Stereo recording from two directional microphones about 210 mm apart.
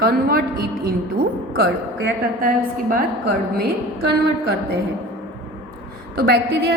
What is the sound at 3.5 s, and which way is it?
A woman's voice, 50° right (ahead or behind).